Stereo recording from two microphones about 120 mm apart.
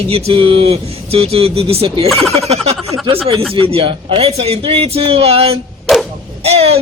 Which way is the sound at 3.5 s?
55° right (ahead or behind).